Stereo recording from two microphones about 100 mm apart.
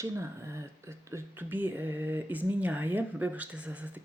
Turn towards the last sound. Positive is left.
turn(degrees=-15)  # may be behind; listen again after turning